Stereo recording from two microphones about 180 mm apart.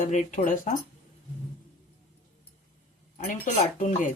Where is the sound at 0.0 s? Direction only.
45° left (ahead or behind).